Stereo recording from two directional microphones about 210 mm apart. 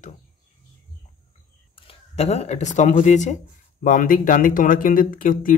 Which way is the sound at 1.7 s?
30° left (ahead or behind).